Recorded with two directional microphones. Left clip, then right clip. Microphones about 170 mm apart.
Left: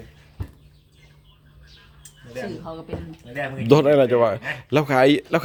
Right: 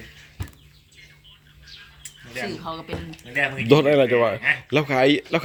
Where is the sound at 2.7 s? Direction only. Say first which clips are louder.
Right 3 dB; 20° left (ahead or behind).